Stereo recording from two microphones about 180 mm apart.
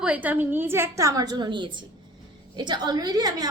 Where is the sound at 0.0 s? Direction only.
10° right (ahead or behind).